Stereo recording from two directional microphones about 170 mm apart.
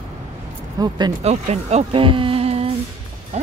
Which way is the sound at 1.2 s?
40° right (ahead or behind).